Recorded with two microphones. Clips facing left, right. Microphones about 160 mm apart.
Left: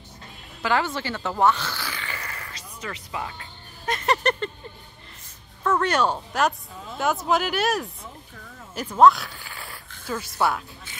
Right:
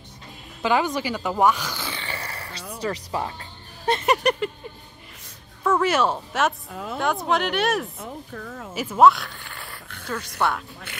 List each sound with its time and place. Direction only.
0.6 s speech: 15° right (ahead or behind); by 4.0 s 35° right (ahead or behind)
4.0 s a sound: 15° right (ahead or behind)
5.6 s speech: 5° right (ahead or behind)
6.7 s a woman's voice: 70° right (ahead or behind)
7.0 s speech: centre (ahead or behind)
8.0 s a sound: 55° right (ahead or behind)
8.7 s speech: 5° right (ahead or behind)